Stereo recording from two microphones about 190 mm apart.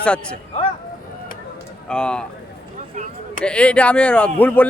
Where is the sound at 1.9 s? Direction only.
5° left (ahead or behind).